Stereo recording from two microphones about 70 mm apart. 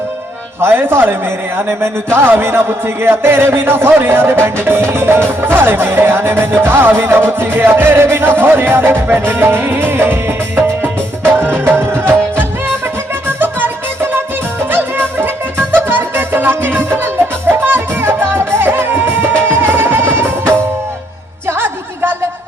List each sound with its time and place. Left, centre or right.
0.6 s music: right